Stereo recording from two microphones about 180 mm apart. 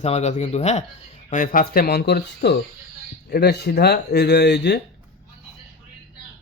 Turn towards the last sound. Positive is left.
turn(degrees=70)  # may be behind; listen again after turning